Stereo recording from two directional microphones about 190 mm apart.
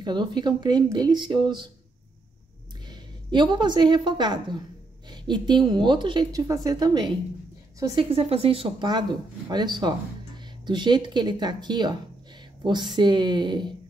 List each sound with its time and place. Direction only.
0.0 s a woman's voice: 25° right (ahead or behind)
2.9 s a woman's voice: 25° right (ahead or behind)